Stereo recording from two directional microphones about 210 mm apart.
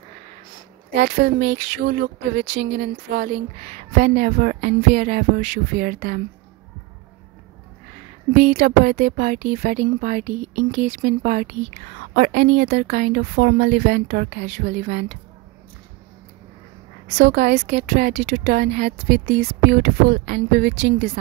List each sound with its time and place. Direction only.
0.9 s a woman's voice: 50° right (ahead or behind)
3.6 s a woman's voice: 35° right (ahead or behind)
8.4 s a woman's voice: 45° right (ahead or behind)
17.2 s a woman's voice: 50° right (ahead or behind)